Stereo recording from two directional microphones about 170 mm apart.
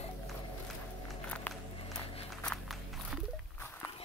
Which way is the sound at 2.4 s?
Centre (ahead or behind).